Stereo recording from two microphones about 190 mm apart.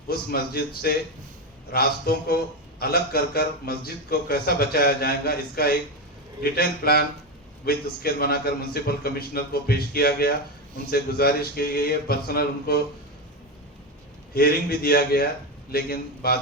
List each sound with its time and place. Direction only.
0.1 s a man's voice: 50° left (ahead or behind)
14.3 s a man's voice: 55° left (ahead or behind)